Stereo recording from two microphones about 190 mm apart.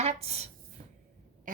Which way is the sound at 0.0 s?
35° right (ahead or behind).